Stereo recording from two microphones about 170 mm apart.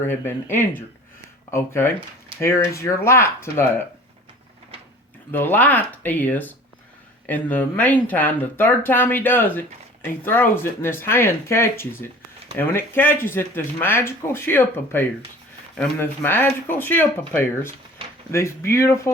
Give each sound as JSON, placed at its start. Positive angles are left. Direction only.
{"t": 0.0, "sound": "speech", "side_deg": 15}
{"t": 5.3, "sound": "speech", "side_deg": 10}